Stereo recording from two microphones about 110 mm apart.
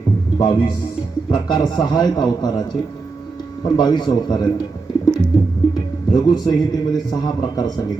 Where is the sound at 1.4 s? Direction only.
40° left (ahead or behind).